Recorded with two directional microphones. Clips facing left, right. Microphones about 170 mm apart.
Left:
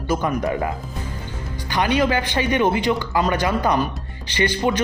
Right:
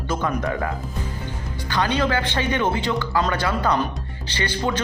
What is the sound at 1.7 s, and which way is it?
A man's voice, 15° left (ahead or behind).